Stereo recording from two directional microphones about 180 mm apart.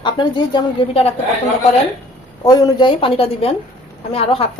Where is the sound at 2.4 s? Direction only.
20° left (ahead or behind).